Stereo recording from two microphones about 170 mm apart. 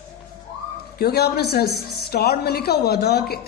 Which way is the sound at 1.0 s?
70° left (ahead or behind).